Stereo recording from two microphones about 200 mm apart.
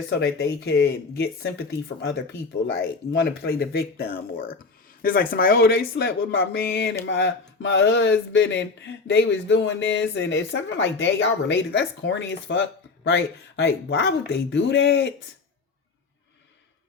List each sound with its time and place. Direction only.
0.2 s speech: 50° left (ahead or behind)
3.1 s speech: 55° left (ahead or behind)